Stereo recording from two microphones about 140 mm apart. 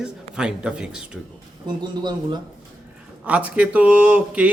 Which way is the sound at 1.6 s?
30° right (ahead or behind).